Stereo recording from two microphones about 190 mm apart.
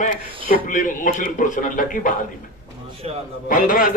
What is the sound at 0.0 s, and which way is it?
A man's voice, 45° left (ahead or behind).